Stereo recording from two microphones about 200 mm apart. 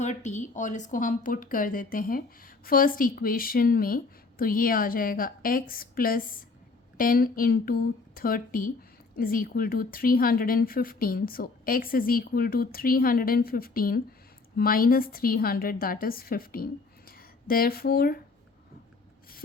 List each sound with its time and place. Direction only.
0.0 s speech: 35° left (ahead or behind)